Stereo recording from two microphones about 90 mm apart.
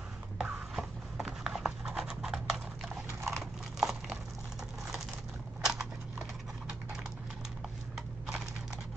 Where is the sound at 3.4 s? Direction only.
5° right (ahead or behind).